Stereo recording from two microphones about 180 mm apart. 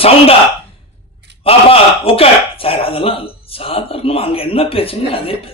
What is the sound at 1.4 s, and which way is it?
Speech, 30° left (ahead or behind).